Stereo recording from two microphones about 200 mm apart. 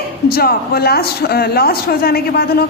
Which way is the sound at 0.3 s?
50° left (ahead or behind).